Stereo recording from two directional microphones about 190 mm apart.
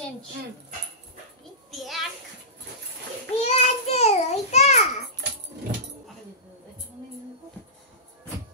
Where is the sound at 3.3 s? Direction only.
35° left (ahead or behind).